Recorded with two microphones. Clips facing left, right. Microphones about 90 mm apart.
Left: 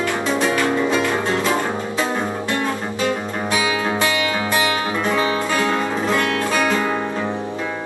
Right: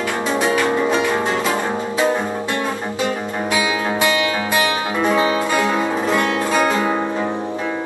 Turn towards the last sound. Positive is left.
turn(degrees=-15)  # may be behind; listen again after turning